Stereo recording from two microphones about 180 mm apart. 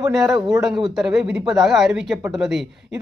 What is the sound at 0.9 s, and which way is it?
Speech, 5° right (ahead or behind).